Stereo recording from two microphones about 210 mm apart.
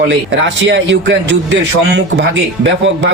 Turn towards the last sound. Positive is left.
turn(degrees=-60)  # may be behind; listen again after turning